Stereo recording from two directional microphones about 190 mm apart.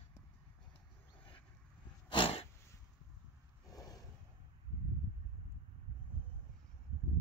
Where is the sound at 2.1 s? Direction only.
30° left (ahead or behind).